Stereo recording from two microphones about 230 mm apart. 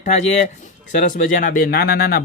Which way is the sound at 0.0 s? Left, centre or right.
Left.